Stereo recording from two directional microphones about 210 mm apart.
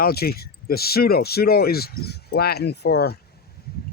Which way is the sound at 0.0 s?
45° left (ahead or behind).